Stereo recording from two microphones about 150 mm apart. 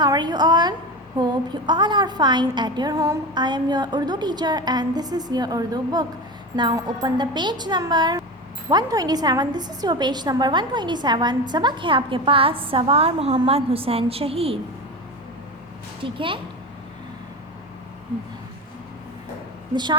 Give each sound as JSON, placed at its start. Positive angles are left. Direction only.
{"t": 0.0, "sound": "a woman's voice", "side_deg": -30}
{"t": 16.0, "sound": "a woman's voice", "side_deg": -35}
{"t": 19.7, "sound": "a woman's voice", "side_deg": -30}